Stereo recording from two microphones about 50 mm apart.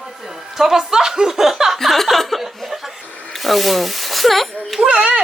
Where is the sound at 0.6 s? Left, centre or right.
Centre.